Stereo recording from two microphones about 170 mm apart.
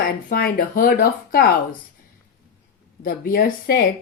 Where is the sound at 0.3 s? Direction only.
60° left (ahead or behind).